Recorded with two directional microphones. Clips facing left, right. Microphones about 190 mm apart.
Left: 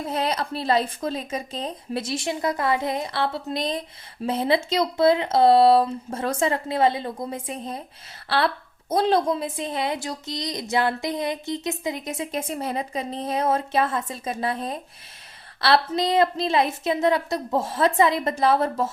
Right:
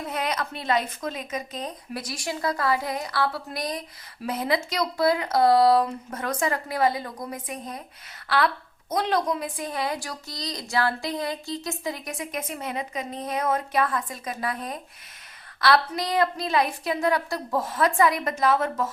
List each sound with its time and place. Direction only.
0.0 s speech: 30° left (ahead or behind)